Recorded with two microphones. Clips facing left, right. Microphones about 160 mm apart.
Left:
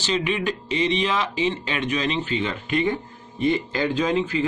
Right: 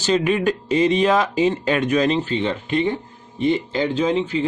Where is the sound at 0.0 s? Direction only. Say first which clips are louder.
Right 6 dB; 45° right (ahead or behind).